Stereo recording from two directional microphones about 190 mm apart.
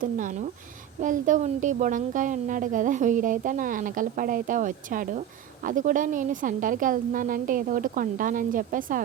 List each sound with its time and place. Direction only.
0.0 s a woman's voice: 45° right (ahead or behind)